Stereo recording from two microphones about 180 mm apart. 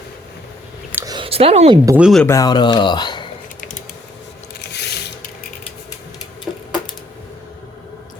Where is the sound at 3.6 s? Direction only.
45° left (ahead or behind).